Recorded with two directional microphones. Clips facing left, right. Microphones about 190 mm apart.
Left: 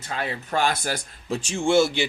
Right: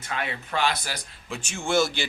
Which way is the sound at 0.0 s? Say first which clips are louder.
Left 2 dB; 35° left (ahead or behind).